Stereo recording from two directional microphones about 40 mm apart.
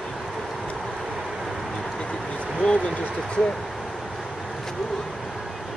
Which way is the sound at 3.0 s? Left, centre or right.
Left.